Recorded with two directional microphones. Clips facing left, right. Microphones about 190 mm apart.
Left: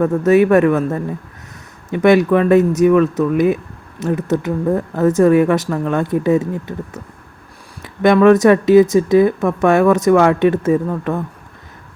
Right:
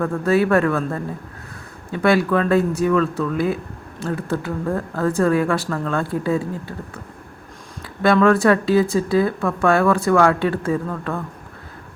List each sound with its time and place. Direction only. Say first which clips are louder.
0.3 s speech: left 6 dB; 20° left (ahead or behind)